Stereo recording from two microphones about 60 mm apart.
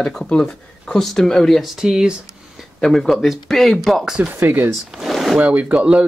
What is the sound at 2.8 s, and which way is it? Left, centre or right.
Speech, centre.